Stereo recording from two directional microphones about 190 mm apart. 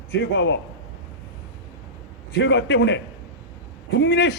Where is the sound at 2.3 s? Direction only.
65° left (ahead or behind).